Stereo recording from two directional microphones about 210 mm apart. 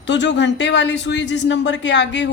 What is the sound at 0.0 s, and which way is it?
Speech, 60° left (ahead or behind).